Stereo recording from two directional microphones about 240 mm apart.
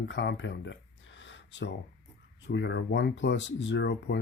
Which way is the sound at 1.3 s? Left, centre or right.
Left.